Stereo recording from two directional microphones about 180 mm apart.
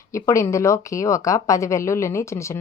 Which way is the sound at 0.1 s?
15° left (ahead or behind).